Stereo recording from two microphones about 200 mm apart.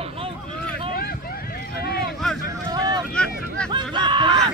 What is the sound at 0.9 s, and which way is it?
Vehicle, 50° left (ahead or behind).